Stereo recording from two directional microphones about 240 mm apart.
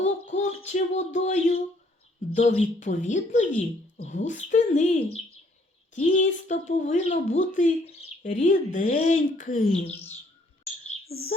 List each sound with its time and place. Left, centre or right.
0.0 s a sound: left
2.3 s a woman's voice: left
11.1 s speech: left